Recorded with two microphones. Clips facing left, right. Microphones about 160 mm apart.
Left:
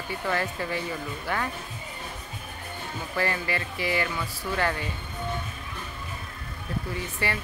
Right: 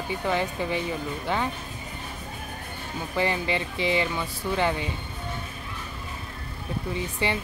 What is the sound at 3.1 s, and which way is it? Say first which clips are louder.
Speech: right 3 dB; 20° right (ahead or behind).